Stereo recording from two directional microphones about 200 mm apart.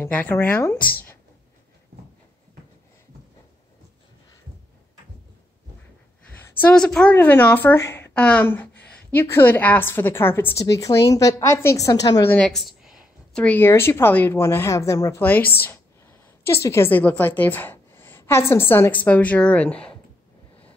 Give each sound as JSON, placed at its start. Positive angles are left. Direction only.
{"t": 0.0, "sound": "a woman's voice", "side_deg": 10}
{"t": 6.3, "sound": "a woman's voice", "side_deg": 10}
{"t": 12.4, "sound": "a woman's voice", "side_deg": 0}